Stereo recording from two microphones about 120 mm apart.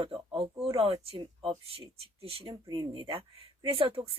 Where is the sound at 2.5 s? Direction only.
40° right (ahead or behind).